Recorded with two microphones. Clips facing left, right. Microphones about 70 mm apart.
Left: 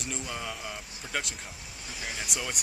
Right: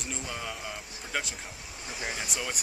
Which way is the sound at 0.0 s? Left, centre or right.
Centre.